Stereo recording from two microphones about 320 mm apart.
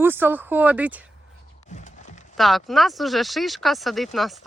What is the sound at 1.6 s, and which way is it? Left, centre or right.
Wood, left.